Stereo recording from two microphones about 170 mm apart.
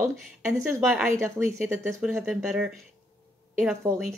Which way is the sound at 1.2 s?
10° right (ahead or behind).